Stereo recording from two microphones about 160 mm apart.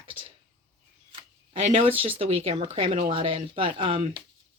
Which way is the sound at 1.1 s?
35° right (ahead or behind).